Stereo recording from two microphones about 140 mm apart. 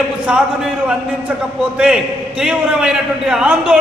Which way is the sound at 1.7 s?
5° right (ahead or behind).